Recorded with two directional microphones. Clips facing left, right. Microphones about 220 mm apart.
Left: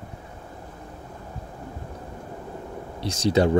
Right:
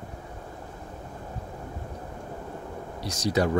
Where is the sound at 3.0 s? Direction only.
25° left (ahead or behind).